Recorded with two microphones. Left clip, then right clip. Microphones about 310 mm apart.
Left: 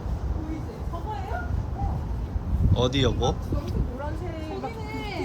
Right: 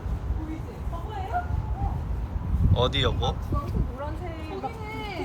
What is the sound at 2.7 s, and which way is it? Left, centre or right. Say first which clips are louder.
Speech: even; centre.